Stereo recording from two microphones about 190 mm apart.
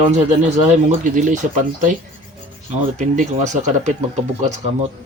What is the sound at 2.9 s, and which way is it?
Speech, 40° right (ahead or behind).